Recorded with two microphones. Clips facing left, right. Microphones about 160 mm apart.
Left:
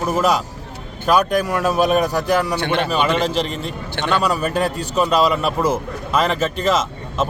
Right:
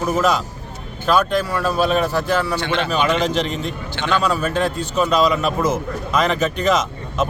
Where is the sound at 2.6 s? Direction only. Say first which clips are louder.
Left 2 dB; 55° left (ahead or behind).